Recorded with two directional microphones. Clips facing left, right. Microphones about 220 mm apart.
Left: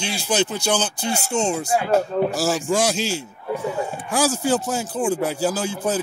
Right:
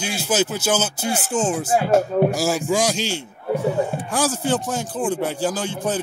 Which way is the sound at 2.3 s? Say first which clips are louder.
Right 1 dB; centre (ahead or behind).